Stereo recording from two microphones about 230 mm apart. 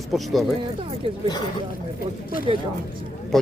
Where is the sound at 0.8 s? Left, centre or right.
Right.